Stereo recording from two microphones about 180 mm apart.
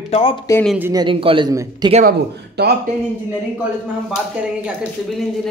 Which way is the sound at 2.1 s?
60° right (ahead or behind).